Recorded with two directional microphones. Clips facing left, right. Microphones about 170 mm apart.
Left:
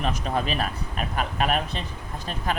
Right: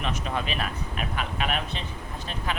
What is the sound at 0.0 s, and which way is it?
Speech, 40° left (ahead or behind).